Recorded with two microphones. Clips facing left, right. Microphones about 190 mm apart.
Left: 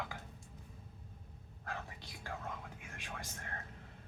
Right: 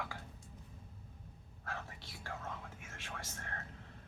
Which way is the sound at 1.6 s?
15° left (ahead or behind).